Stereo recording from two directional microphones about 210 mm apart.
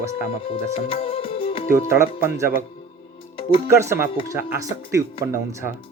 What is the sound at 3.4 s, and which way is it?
Music, 25° left (ahead or behind).